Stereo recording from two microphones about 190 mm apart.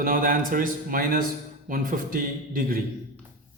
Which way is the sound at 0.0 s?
50° right (ahead or behind).